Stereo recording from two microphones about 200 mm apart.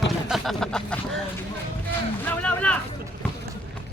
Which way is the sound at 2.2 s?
10° left (ahead or behind).